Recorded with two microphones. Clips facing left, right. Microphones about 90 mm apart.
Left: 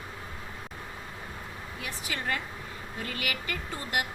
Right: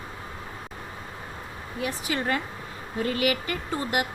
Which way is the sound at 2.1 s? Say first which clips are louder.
Right 5 dB; 40° right (ahead or behind).